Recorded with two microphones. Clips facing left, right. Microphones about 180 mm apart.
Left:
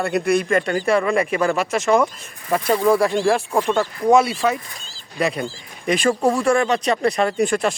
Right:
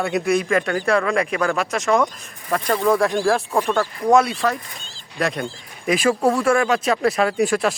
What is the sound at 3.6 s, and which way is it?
Speech, 15° left (ahead or behind).